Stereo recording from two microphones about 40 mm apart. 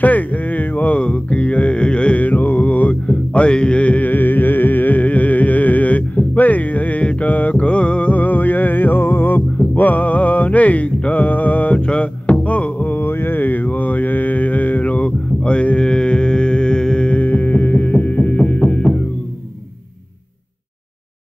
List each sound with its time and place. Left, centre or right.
0.0 s a sound: left
0.9 s music: left
2.1 s mantra: left
3.1 s music: left
4.0 s music: left
8.1 s music: left
9.8 s music: left
11.0 s mantra: left
11.2 s music: left
13.0 s a sound: left
13.4 s mantra: left
15.0 s mantra: left
17.1 s music: left
18.8 s music: centre